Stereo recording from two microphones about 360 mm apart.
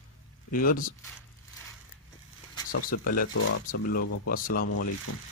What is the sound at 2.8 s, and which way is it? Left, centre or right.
Speech, left.